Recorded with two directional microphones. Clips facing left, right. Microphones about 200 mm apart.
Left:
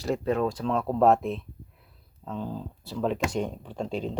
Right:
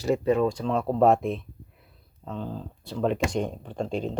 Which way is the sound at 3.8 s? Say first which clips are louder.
Right 1 dB; 50° right (ahead or behind).